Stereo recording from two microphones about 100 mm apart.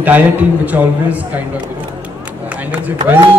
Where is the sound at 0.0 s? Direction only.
15° right (ahead or behind).